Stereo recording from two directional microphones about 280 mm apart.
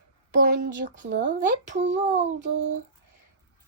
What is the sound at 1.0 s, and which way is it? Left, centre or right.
Speech, right.